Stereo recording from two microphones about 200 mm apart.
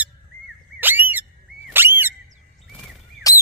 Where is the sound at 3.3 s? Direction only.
15° left (ahead or behind).